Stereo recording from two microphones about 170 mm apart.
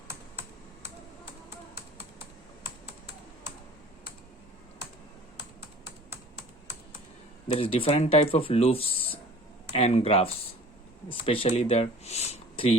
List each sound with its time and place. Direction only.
7.4 s speech: 30° left (ahead or behind)